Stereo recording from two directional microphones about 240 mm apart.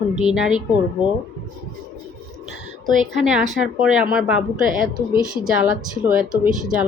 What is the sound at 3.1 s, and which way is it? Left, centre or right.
A woman's voice, centre.